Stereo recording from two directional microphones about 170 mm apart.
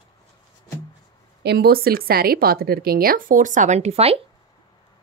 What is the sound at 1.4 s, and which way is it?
A woman's voice, 70° right (ahead or behind).